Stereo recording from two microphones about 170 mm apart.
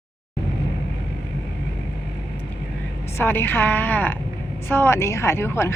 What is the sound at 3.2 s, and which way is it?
A woman's voice, 10° left (ahead or behind).